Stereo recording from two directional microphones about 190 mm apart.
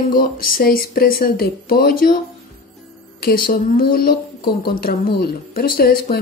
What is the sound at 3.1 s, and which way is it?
Speech, 50° left (ahead or behind).